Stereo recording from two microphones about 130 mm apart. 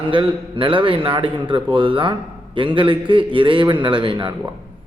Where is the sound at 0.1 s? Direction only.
40° right (ahead or behind).